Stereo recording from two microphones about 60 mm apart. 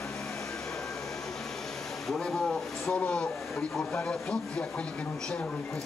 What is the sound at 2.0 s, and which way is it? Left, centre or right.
Speech, centre.